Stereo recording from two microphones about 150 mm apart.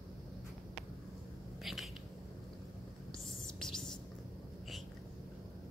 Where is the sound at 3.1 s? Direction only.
5° left (ahead or behind).